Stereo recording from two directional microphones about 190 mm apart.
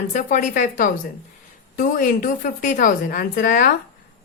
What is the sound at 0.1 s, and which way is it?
A woman's voice, 40° left (ahead or behind).